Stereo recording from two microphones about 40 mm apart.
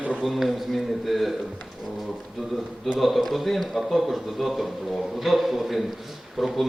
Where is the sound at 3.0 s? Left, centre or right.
Centre.